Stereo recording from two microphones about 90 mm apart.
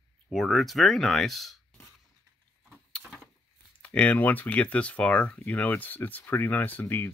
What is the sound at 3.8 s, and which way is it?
Speech, 15° left (ahead or behind).